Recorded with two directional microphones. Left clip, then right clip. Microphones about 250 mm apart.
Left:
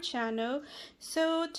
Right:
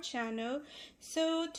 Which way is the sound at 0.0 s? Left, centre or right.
Left.